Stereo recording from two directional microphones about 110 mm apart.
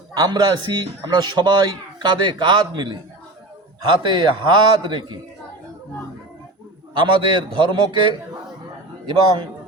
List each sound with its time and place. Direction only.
0.1 s a man's voice: 35° right (ahead or behind)
6.9 s a man's voice: 45° right (ahead or behind)